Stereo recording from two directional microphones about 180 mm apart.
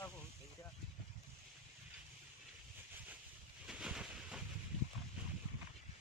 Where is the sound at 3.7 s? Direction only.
5° right (ahead or behind).